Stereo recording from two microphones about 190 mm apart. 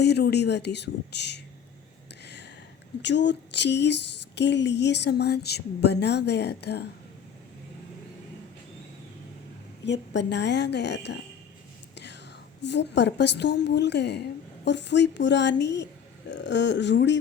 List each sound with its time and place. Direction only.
0.0 s a woman's voice: 60° left (ahead or behind)
2.2 s a sound: 65° left (ahead or behind)
3.0 s a woman's voice: 65° left (ahead or behind)
9.8 s a woman's voice: 65° left (ahead or behind)
12.6 s a woman's voice: 65° left (ahead or behind)